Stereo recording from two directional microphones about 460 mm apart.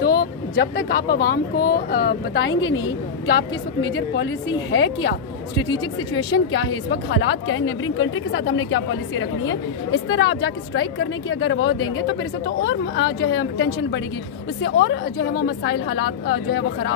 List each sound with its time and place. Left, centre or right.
0.0 s speech: left
2.5 s a woman's voice: centre
3.9 s a woman's voice: left
6.1 s a woman's voice: left